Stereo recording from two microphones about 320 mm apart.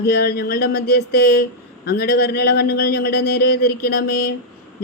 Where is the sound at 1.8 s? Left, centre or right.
Left.